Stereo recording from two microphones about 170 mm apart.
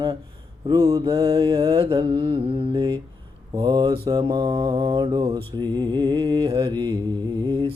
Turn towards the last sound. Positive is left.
turn(degrees=-25)  # may be behind; listen again after turning